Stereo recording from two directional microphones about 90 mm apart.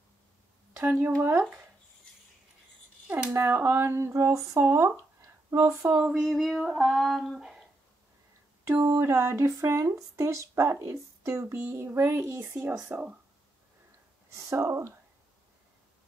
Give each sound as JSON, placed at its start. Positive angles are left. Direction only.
{"t": 0.7, "sound": "speech", "side_deg": -25}
{"t": 3.3, "sound": "speech", "side_deg": -25}
{"t": 5.9, "sound": "speech", "side_deg": -10}
{"t": 8.6, "sound": "speech", "side_deg": -35}
{"t": 12.4, "sound": "speech", "side_deg": -20}
{"t": 14.3, "sound": "speech", "side_deg": -35}